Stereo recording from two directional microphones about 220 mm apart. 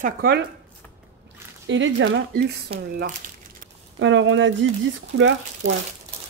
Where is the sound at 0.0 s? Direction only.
45° right (ahead or behind).